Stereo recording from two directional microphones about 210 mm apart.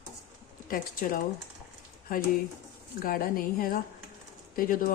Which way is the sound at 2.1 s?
40° left (ahead or behind).